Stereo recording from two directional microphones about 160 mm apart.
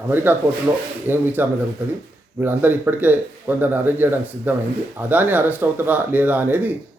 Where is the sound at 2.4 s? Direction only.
10° right (ahead or behind).